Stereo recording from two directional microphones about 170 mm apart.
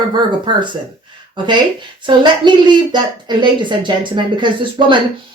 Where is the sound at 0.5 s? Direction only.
25° right (ahead or behind).